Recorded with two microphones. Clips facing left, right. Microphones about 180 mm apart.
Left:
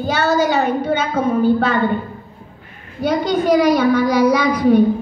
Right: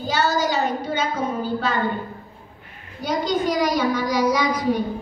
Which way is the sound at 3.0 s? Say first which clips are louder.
Left 5 dB; 60° left (ahead or behind).